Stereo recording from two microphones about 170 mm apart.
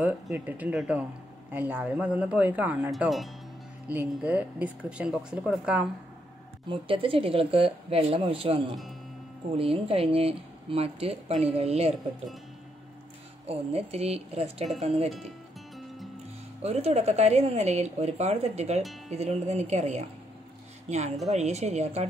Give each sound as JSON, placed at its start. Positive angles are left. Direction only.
{"t": 0.0, "sound": "speech", "side_deg": -10}
{"t": 6.7, "sound": "speech", "side_deg": -30}
{"t": 9.6, "sound": "speech", "side_deg": -35}
{"t": 13.5, "sound": "speech", "side_deg": -35}
{"t": 16.6, "sound": "speech", "side_deg": -35}
{"t": 21.3, "sound": "speech", "side_deg": -40}